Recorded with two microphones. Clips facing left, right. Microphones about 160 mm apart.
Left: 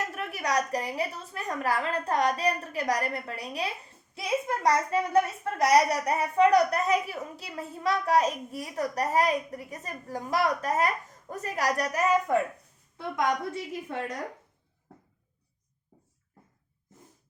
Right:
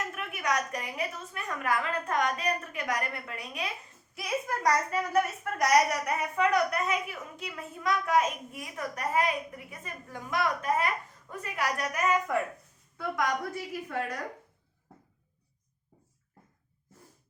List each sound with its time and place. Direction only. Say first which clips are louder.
0.1 s a child's voice: left 2 dB; 35° left (ahead or behind)
12.3 s a woman's voice: left 4 dB; 30° left (ahead or behind)